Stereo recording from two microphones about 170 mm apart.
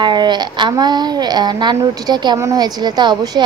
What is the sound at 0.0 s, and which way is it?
Speech, 25° right (ahead or behind).